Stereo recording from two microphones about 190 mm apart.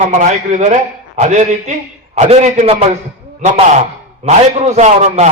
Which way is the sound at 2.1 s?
30° right (ahead or behind).